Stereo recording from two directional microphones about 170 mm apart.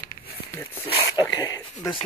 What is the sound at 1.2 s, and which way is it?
Dog, 25° left (ahead or behind).